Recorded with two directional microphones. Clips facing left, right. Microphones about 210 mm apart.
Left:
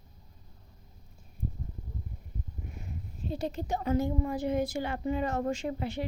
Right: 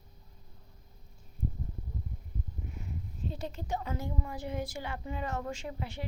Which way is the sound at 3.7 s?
45° left (ahead or behind).